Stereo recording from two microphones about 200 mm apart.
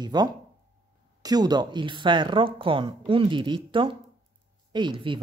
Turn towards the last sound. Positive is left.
turn(degrees=-25)  # may be behind; listen again after turning